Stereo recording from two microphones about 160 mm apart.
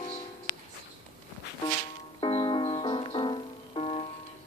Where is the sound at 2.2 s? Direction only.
30° left (ahead or behind).